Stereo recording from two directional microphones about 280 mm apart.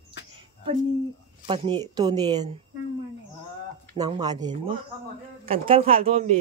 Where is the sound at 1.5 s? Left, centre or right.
Centre.